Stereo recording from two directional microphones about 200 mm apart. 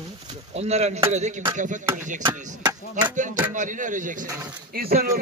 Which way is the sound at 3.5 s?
40° right (ahead or behind).